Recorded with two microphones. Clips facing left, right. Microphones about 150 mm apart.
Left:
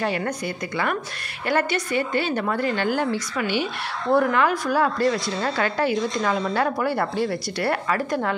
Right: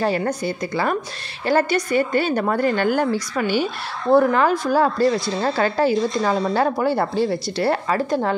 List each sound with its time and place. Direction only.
0.0 s a woman's voice: 35° right (ahead or behind)
4.1 s a woman's voice: 30° right (ahead or behind)